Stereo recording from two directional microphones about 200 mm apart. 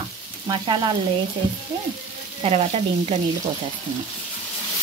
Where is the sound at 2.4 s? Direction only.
30° right (ahead or behind).